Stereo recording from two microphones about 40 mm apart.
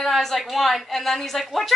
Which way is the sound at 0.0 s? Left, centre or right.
Centre.